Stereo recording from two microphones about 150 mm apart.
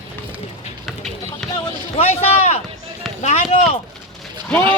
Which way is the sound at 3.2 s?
50° left (ahead or behind).